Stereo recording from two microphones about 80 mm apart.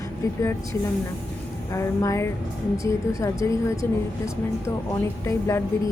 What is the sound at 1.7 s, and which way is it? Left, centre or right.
A woman's voice, left.